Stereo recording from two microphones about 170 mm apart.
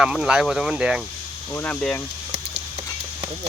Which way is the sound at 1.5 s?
10° left (ahead or behind).